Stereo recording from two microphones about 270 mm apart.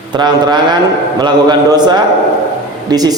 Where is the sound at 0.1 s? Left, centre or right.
Centre.